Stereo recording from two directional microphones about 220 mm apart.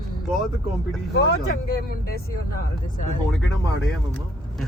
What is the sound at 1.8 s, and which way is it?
Speech, 45° left (ahead or behind).